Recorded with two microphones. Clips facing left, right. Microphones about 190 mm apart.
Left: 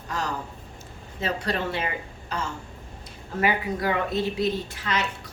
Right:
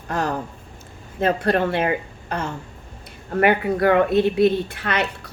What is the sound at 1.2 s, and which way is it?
A woman's voice, 55° right (ahead or behind).